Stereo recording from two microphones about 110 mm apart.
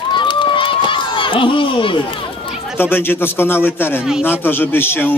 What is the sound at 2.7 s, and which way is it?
A man's voice, 20° left (ahead or behind).